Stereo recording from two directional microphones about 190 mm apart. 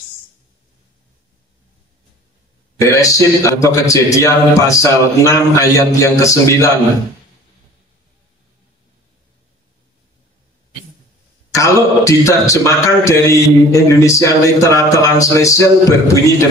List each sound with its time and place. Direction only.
2.8 s a man's voice: 15° left (ahead or behind)
11.5 s a man's voice: 15° left (ahead or behind)